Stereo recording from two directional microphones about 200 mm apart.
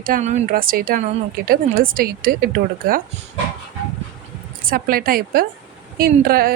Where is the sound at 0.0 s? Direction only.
40° right (ahead or behind).